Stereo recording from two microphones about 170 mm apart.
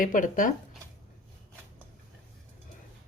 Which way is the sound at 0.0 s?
55° left (ahead or behind).